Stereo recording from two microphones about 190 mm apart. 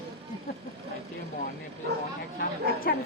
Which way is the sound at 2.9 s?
50° left (ahead or behind).